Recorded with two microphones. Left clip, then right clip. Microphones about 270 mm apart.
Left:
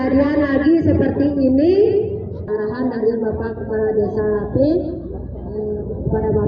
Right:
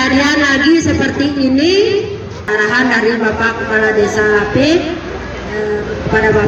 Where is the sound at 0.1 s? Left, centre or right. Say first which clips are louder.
Right 5 dB; right.